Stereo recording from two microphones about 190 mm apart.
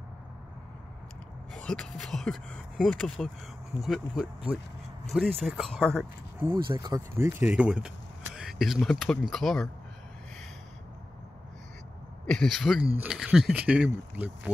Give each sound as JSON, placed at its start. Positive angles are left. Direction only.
{"t": 1.5, "sound": "speech", "side_deg": 5}
{"t": 6.7, "sound": "speech", "side_deg": -20}
{"t": 8.4, "sound": "vehicle", "side_deg": 0}
{"t": 8.8, "sound": "speech", "side_deg": 0}
{"t": 12.3, "sound": "speech", "side_deg": 5}